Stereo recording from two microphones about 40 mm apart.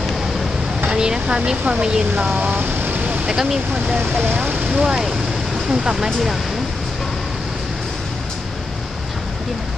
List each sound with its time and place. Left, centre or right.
0.8 s speech: right
2.3 s a sound: right
3.3 s speech: centre
4.0 s speech: right
4.7 s speech: centre